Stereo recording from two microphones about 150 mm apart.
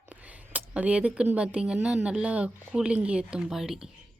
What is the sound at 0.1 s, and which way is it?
A woman's voice, 10° right (ahead or behind).